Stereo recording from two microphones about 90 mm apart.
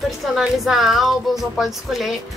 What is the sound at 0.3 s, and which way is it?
Speech, 5° right (ahead or behind).